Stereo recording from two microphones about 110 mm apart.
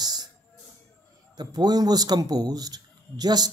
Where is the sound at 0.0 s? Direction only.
40° right (ahead or behind).